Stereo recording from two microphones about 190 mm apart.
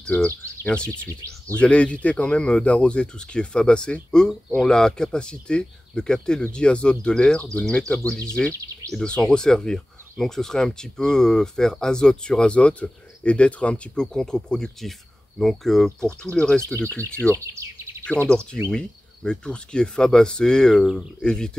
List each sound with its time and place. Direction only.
0.0 s speech: 5° left (ahead or behind)
8.5 s speech: 15° right (ahead or behind)
8.9 s speech: 5° left (ahead or behind)
17.3 s speech: 15° right (ahead or behind)
18.3 s speech: 5° left (ahead or behind)